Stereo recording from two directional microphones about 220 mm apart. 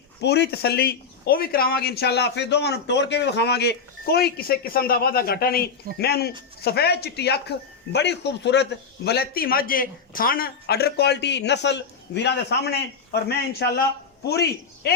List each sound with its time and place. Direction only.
0.2 s speech: 50° left (ahead or behind)